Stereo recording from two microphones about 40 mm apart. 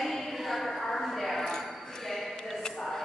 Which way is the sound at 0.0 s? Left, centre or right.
Centre.